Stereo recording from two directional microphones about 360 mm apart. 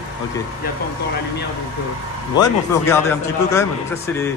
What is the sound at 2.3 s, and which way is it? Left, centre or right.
A man's voice, centre.